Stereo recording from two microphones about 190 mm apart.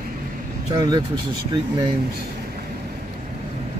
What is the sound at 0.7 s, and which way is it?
Speech, 20° right (ahead or behind).